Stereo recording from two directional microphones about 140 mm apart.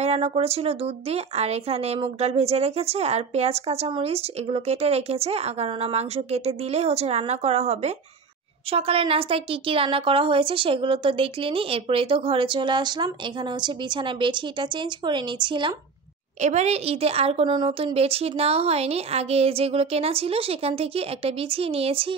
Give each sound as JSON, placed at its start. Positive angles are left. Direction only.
{"t": 0.0, "sound": "a woman's voice", "side_deg": -50}
{"t": 16.3, "sound": "speech", "side_deg": -55}